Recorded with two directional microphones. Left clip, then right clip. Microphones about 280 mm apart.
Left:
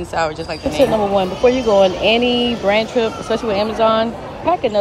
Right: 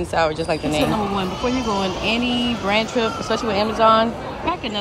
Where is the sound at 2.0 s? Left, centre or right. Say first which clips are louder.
Left 7 dB; centre.